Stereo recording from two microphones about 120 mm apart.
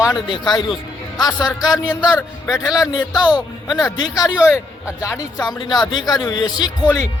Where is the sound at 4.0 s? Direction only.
30° left (ahead or behind).